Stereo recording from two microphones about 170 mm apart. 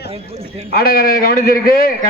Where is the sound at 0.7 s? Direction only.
65° left (ahead or behind).